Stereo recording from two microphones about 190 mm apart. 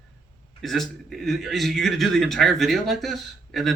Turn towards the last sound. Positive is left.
turn(degrees=0)  # may be behind; listen again after turning